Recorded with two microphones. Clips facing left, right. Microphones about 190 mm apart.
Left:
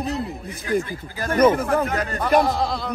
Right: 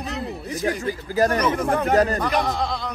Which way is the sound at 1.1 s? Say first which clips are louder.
Left 3 dB; 40° right (ahead or behind).